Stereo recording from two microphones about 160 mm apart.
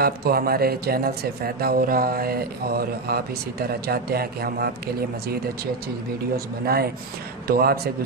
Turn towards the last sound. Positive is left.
turn(degrees=-75)  # may be behind; listen again after turning